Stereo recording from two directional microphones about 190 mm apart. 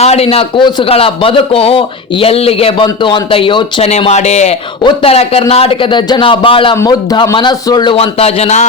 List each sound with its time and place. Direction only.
0.0 s a man's voice: 30° left (ahead or behind)